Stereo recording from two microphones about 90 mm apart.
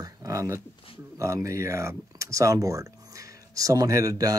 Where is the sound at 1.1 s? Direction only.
35° right (ahead or behind).